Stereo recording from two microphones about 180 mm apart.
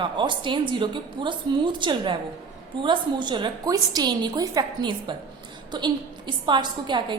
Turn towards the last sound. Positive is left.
turn(degrees=-25)  # may be behind; listen again after turning